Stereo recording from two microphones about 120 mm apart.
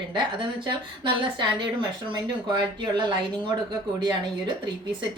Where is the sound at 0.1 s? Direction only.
40° right (ahead or behind).